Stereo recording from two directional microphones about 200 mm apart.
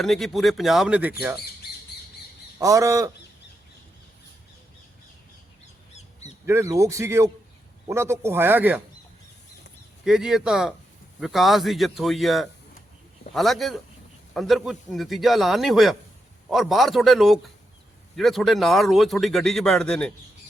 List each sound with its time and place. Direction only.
0.0 s a man's voice: centre (ahead or behind)
2.6 s speech: 15° right (ahead or behind)
6.4 s speech: 15° right (ahead or behind)
10.0 s a man's voice: centre (ahead or behind)